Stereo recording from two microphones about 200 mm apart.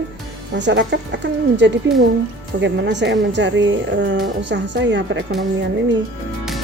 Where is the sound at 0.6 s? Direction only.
60° right (ahead or behind).